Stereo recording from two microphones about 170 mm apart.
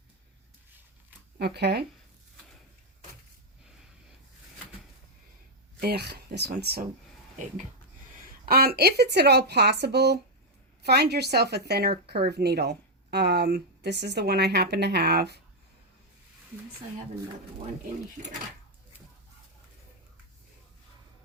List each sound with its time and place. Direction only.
1.4 s speech: 75° right (ahead or behind)
5.8 s speech: 70° right (ahead or behind)
8.4 s speech: 65° right (ahead or behind)